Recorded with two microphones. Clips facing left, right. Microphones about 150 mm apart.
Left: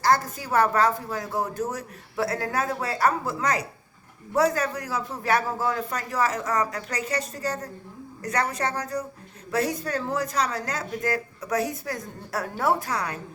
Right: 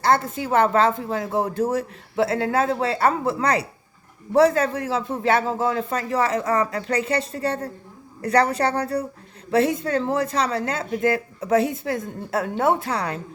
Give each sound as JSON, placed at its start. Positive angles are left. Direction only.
{"t": 0.0, "sound": "a woman's voice", "side_deg": -25}